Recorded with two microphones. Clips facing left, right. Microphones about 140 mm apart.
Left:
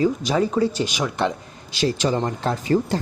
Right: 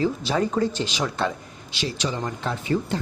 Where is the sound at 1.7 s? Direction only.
45° left (ahead or behind).